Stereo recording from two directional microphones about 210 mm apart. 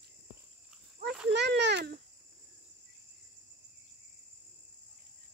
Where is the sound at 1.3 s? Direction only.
55° right (ahead or behind).